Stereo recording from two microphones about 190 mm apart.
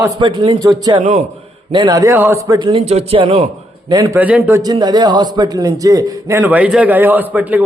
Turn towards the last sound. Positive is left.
turn(degrees=-10)  # may be behind; listen again after turning